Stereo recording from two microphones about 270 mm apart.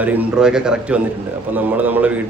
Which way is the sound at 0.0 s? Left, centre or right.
Centre.